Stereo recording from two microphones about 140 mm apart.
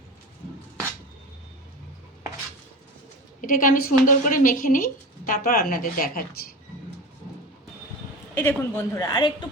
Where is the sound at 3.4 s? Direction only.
75° left (ahead or behind).